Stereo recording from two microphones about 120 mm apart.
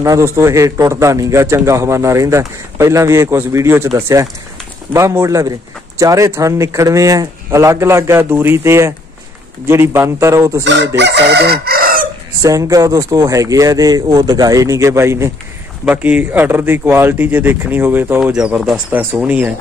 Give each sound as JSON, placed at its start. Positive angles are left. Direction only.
{"t": 0.0, "sound": "a man's voice", "side_deg": -25}
{"t": 12.4, "sound": "a man's voice", "side_deg": -25}
{"t": 15.8, "sound": "speech", "side_deg": -10}